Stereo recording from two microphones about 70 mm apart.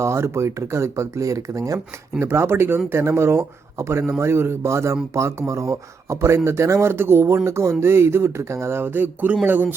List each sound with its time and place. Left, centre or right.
0.0 s speech: right
2.1 s a man's voice: right